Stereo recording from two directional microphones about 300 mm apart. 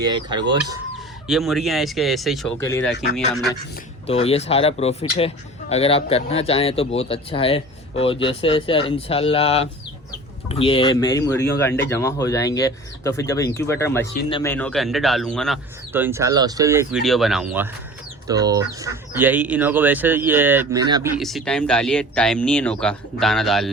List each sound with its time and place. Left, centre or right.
0.0 s speech: centre
1.3 s speech: centre
4.0 s a man's voice: centre
14.5 s speech: centre
21.2 s speech: centre